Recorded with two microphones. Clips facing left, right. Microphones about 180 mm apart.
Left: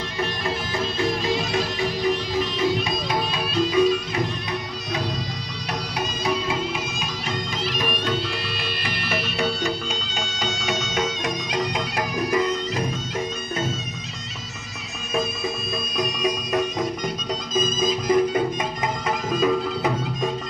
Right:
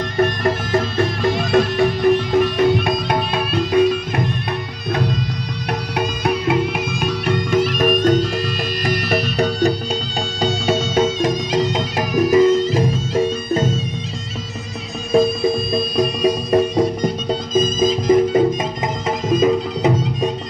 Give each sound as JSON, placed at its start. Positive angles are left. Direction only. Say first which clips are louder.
{"t": 0.2, "sound": "music", "louder": "right 9 dB", "side_deg": -55}
{"t": 15.1, "sound": "music", "louder": "right 11 dB", "side_deg": -30}